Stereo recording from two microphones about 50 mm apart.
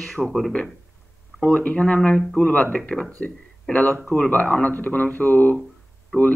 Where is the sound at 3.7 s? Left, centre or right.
Left.